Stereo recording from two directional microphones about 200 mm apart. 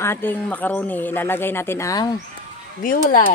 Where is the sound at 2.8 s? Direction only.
45° left (ahead or behind).